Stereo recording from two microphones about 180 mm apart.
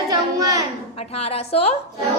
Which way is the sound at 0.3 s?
20° right (ahead or behind).